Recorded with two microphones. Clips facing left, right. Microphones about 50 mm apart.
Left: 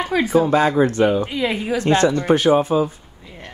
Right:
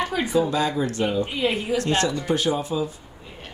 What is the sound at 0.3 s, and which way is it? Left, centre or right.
Speech, left.